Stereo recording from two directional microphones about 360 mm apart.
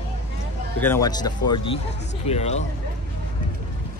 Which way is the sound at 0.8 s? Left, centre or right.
Centre.